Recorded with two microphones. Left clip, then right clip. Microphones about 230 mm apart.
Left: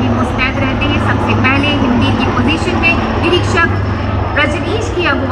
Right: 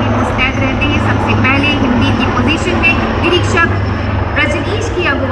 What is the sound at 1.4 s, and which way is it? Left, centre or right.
Vehicle, centre.